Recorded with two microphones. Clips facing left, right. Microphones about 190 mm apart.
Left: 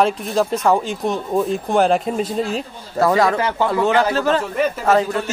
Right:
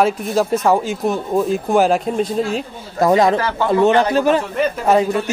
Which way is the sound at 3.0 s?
20° right (ahead or behind).